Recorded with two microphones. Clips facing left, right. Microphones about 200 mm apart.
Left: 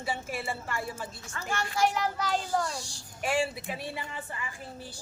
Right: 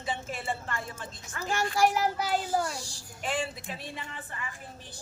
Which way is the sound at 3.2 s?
10° left (ahead or behind).